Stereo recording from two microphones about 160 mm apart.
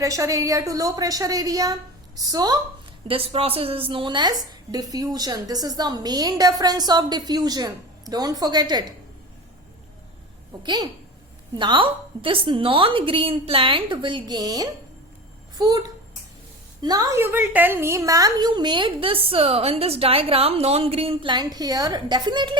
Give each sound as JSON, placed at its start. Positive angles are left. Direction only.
{"t": 0.0, "sound": "a woman's voice", "side_deg": -20}
{"t": 3.1, "sound": "a woman's voice", "side_deg": -35}
{"t": 10.6, "sound": "a woman's voice", "side_deg": -25}